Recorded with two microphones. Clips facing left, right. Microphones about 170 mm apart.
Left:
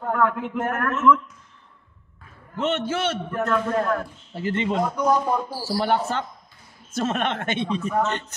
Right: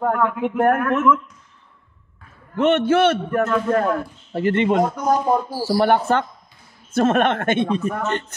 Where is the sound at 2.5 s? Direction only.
60° right (ahead or behind).